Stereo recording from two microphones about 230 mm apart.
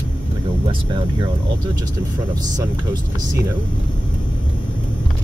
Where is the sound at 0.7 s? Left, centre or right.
Centre.